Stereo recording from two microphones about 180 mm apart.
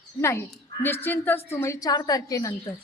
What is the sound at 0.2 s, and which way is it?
A woman's voice, 15° left (ahead or behind).